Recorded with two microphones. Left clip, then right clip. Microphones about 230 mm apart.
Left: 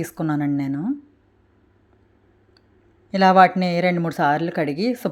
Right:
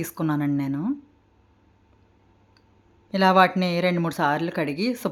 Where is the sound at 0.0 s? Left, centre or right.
Centre.